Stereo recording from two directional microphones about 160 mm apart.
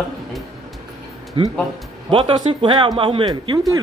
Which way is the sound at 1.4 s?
35° right (ahead or behind).